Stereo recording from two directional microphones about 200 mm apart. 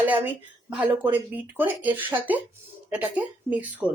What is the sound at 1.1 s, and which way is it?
Speech, 10° right (ahead or behind).